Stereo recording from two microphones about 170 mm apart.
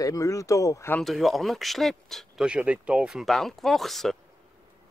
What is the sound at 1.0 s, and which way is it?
Speech, centre (ahead or behind).